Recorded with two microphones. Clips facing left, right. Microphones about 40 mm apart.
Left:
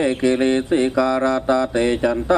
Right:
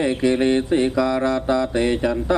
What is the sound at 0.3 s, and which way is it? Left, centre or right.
Mantra, left.